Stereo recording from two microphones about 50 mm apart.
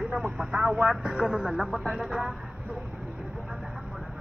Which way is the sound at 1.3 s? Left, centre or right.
Centre.